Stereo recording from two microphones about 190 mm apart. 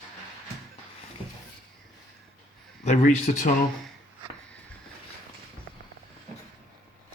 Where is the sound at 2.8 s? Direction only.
40° left (ahead or behind).